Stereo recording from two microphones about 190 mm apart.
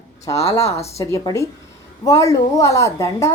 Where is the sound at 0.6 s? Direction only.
15° left (ahead or behind).